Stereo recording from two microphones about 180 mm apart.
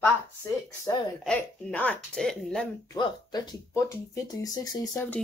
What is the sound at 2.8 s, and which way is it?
Speech, 25° left (ahead or behind).